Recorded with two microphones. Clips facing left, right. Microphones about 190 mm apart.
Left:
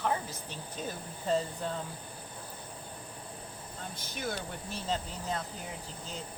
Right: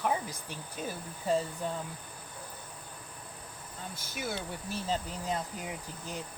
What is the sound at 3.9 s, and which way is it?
Speech, 5° right (ahead or behind).